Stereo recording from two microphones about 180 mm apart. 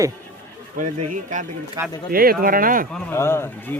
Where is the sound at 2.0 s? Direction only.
55° right (ahead or behind).